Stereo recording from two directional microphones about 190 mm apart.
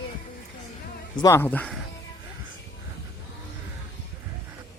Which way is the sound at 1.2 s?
15° left (ahead or behind).